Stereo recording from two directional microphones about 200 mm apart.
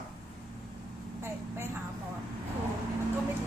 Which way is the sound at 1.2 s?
10° right (ahead or behind).